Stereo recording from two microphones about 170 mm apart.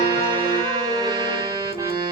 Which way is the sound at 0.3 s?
30° right (ahead or behind).